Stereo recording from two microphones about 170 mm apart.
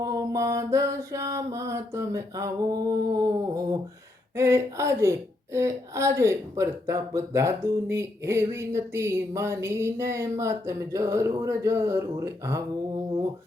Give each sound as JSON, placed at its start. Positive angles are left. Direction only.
{"t": 0.0, "sound": "mantra", "side_deg": -20}
{"t": 4.4, "sound": "speech", "side_deg": -15}